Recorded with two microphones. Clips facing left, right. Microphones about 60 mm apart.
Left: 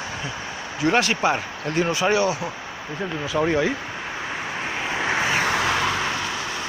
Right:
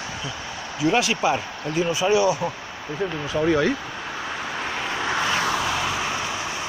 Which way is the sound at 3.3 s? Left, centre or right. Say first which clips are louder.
Even; left.